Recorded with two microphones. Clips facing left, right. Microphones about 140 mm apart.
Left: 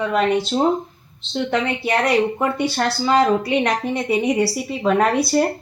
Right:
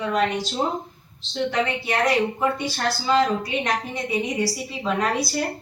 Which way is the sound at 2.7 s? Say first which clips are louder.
Left 4 dB; 65° left (ahead or behind).